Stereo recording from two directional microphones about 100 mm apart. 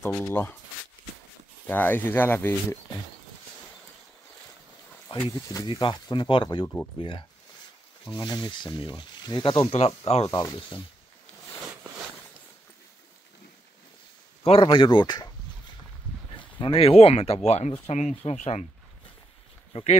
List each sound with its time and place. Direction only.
0.0 s speech: 20° left (ahead or behind)
1.7 s speech: 20° left (ahead or behind)
5.3 s speech: 35° left (ahead or behind)
5.7 s speech: 55° left (ahead or behind)
6.6 s speech: 20° left (ahead or behind)
7.0 s speech: 60° left (ahead or behind)
8.1 s speech: 45° left (ahead or behind)
9.7 s speech: 90° left
10.3 s speech: 50° left (ahead or behind)
14.4 s speech: 70° left (ahead or behind)
16.5 s speech: 60° left (ahead or behind); by 18.6 s 90° left
19.7 s speech: 80° left